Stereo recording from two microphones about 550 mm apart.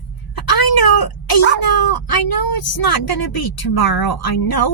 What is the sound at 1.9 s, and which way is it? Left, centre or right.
A woman's voice, left.